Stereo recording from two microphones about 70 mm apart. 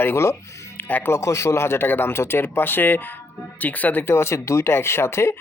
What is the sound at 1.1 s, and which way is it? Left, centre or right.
Speech, left.